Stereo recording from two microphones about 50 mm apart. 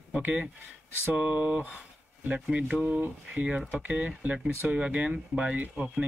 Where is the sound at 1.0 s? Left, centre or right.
Right.